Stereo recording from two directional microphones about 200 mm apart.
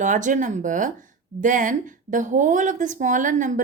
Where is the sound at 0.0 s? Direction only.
40° right (ahead or behind).